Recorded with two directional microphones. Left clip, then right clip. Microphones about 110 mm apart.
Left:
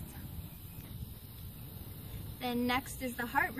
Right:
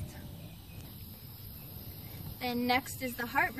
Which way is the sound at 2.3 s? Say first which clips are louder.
Right 3 dB; 25° left (ahead or behind).